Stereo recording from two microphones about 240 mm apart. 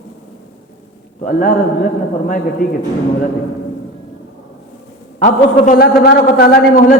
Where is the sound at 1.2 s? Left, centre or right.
Left.